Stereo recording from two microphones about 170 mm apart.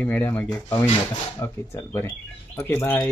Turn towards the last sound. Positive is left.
turn(degrees=10)  # may be behind; listen again after turning